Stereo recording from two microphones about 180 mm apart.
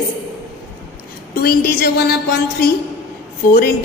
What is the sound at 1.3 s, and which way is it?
Speech, 60° left (ahead or behind).